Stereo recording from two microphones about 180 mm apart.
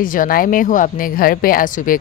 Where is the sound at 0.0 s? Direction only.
50° left (ahead or behind).